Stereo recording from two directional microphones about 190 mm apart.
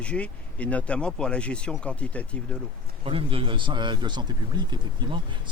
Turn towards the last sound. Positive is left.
turn(degrees=-25)  # may be behind; listen again after turning